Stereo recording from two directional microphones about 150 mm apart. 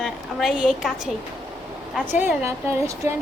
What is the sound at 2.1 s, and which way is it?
A woman's voice, 15° right (ahead or behind).